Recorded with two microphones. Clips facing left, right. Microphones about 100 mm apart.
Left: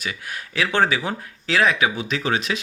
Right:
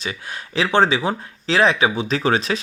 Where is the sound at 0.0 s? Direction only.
25° right (ahead or behind).